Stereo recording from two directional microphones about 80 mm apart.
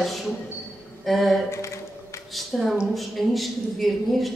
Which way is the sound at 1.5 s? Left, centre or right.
Left.